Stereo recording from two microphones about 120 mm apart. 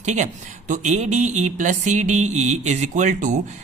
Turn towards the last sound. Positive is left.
turn(degrees=-90)